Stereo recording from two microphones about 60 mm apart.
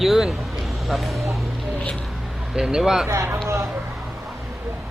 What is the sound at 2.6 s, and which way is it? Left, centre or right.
Speech, centre.